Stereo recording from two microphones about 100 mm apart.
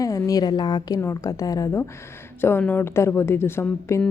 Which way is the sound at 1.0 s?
35° left (ahead or behind).